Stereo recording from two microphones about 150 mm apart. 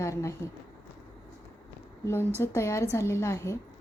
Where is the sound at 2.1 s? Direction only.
15° left (ahead or behind).